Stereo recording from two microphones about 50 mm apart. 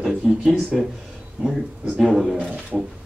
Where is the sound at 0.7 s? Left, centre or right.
Centre.